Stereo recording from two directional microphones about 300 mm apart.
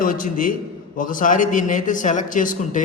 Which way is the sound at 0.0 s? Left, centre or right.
Left.